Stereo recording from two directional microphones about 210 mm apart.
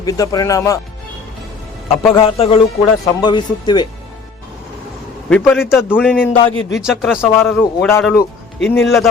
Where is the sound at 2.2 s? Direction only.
25° left (ahead or behind).